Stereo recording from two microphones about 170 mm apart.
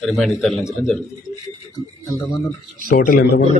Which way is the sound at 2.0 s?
25° left (ahead or behind).